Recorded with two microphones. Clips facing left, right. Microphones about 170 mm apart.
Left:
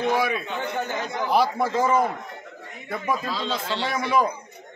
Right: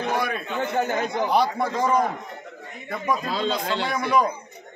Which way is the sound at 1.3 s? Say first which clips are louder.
Left 3 dB; 5° left (ahead or behind).